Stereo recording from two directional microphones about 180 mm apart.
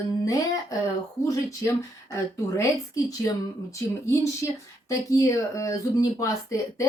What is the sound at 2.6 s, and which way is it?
Speech, 20° left (ahead or behind).